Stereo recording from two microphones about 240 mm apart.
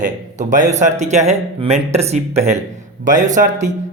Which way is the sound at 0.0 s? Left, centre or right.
Right.